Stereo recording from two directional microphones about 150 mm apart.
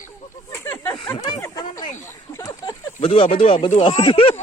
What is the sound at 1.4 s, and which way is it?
Speech, 20° left (ahead or behind).